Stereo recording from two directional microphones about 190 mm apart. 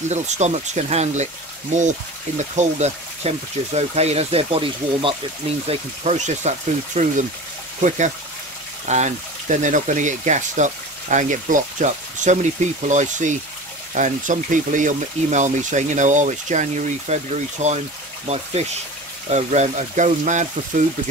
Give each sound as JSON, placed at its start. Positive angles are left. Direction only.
{"t": 0.1, "sound": "speech", "side_deg": -35}
{"t": 8.8, "sound": "speech", "side_deg": -40}